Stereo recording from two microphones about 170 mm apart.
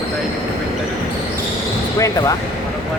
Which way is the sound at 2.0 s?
20° left (ahead or behind).